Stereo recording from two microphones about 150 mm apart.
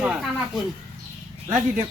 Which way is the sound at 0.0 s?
5° right (ahead or behind).